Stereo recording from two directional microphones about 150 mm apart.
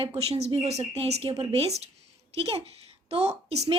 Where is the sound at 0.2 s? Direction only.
45° right (ahead or behind).